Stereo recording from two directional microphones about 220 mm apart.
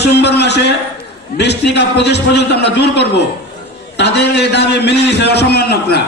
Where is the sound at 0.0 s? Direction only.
50° left (ahead or behind).